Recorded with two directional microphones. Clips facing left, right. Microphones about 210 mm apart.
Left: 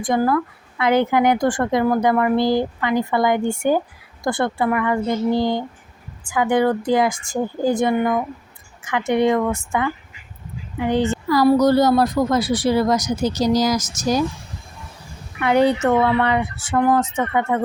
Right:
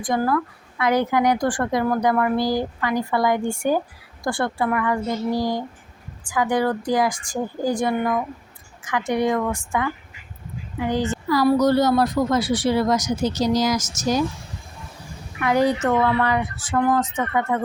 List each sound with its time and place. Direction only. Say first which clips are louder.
0.0 s a woman's voice: left 3 dB; 25° left (ahead or behind)
10.8 s a woman's voice: left 3 dB; 25° left (ahead or behind)
15.4 s a woman's voice: left 3 dB; 30° left (ahead or behind)